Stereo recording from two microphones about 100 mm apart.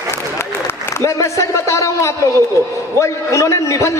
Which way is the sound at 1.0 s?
30° left (ahead or behind).